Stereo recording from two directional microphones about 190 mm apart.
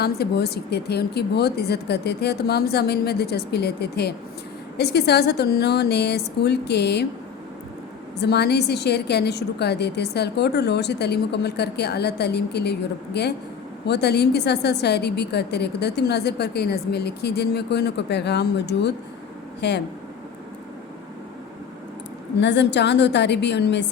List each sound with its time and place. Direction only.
0.0 s a woman's voice: 55° left (ahead or behind)
8.2 s a woman's voice: 60° left (ahead or behind)
22.4 s a woman's voice: 65° left (ahead or behind)